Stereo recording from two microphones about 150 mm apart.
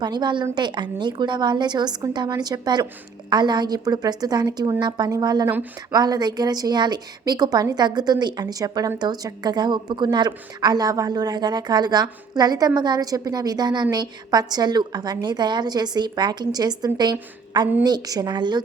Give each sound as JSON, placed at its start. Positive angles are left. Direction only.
{"t": 0.0, "sound": "a woman's voice", "side_deg": -30}